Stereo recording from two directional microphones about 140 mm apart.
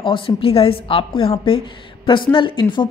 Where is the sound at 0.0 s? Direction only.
40° left (ahead or behind).